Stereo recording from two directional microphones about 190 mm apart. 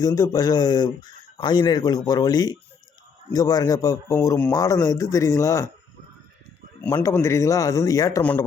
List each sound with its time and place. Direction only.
0.0 s a man's voice: 20° left (ahead or behind)
6.8 s a man's voice: 15° left (ahead or behind)